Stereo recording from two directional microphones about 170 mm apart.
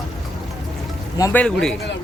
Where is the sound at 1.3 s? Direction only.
5° left (ahead or behind).